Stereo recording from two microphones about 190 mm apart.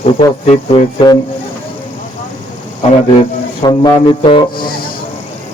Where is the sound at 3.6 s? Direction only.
25° left (ahead or behind).